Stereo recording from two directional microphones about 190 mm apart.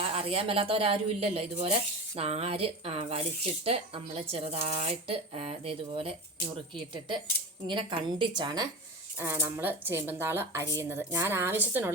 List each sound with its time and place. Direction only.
0.1 s a woman's voice: 30° right (ahead or behind)
9.1 s speech: 10° right (ahead or behind)